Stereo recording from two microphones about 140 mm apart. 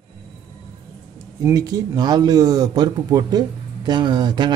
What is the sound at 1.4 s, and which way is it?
Speech, 25° right (ahead or behind).